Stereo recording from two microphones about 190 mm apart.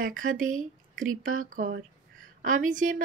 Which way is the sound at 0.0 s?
45° right (ahead or behind).